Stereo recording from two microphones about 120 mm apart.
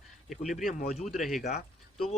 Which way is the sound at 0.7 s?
60° left (ahead or behind).